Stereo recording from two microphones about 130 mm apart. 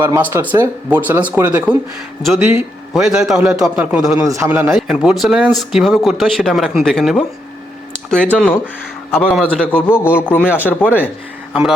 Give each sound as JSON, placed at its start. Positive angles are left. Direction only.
{"t": 0.0, "sound": "speech", "side_deg": -20}
{"t": 2.9, "sound": "speech", "side_deg": -5}
{"t": 4.2, "sound": "speech", "side_deg": -25}
{"t": 4.7, "sound": "a man's voice", "side_deg": -5}